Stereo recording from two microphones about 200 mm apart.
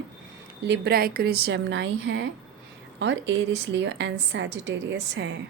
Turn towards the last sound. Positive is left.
turn(degrees=-65)  # may be behind; listen again after turning